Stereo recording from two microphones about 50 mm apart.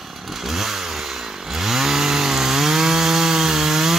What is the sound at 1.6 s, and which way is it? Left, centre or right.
Chainsaw, centre.